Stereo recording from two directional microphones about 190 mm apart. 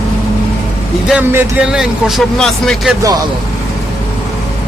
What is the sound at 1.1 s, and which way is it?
Speech, 10° right (ahead or behind).